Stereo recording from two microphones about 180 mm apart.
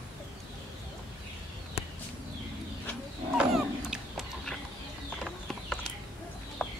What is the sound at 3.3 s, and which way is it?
Dog, 5° right (ahead or behind).